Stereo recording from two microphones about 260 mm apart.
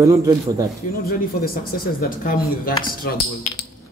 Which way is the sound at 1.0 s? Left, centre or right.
Left.